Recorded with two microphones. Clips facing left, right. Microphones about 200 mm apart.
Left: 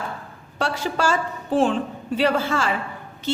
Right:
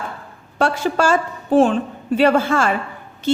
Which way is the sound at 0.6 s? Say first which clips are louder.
Right 5 dB; 50° right (ahead or behind).